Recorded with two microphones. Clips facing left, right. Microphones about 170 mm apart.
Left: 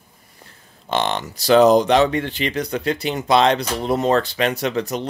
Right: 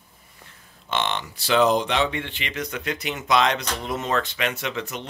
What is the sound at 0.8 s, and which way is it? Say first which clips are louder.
Speech: left 5 dB; 35° left (ahead or behind).